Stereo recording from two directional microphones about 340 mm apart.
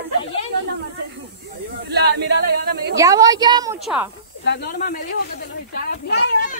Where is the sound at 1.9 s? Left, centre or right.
Right.